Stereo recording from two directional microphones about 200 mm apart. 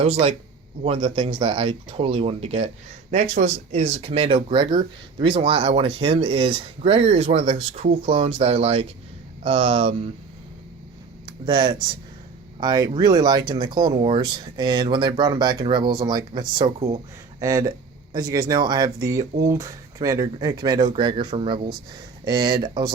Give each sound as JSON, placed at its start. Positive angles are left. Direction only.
{"t": 0.0, "sound": "speech", "side_deg": -30}
{"t": 11.3, "sound": "speech", "side_deg": -25}